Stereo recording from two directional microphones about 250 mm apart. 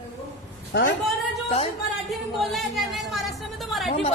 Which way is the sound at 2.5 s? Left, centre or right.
Centre.